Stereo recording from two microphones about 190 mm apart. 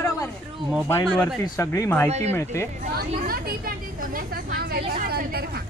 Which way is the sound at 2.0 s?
35° right (ahead or behind).